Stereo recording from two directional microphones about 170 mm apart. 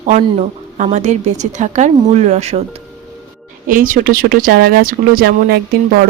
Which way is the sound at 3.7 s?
55° right (ahead or behind).